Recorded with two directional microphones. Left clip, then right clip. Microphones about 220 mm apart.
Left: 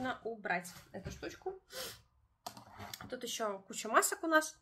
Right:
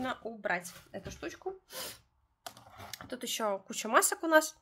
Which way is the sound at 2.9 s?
50° right (ahead or behind).